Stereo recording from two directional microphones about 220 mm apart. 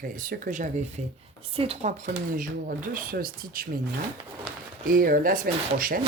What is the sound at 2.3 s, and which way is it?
Speech, 40° right (ahead or behind).